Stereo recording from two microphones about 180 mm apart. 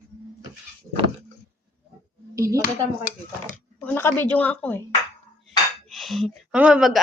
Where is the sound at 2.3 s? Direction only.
15° right (ahead or behind).